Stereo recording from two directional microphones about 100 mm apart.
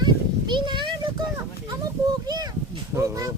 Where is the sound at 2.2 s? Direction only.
45° right (ahead or behind).